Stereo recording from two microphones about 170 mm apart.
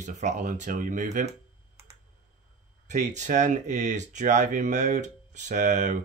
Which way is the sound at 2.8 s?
45° right (ahead or behind).